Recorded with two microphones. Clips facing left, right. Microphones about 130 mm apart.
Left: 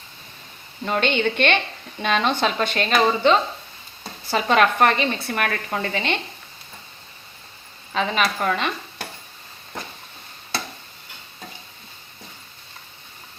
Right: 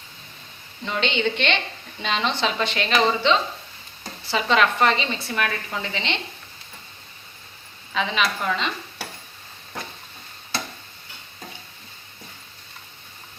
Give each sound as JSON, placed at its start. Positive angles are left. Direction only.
{"t": 0.9, "sound": "a woman's voice", "side_deg": 50}
{"t": 7.9, "sound": "a woman's voice", "side_deg": 45}